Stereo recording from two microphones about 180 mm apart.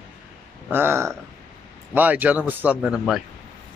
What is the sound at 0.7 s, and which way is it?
A man's voice, 15° right (ahead or behind).